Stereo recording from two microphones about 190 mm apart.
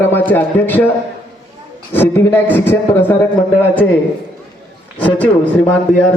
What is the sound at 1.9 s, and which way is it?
Speech, 10° left (ahead or behind).